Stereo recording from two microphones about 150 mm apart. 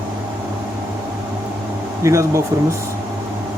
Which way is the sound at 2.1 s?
20° right (ahead or behind).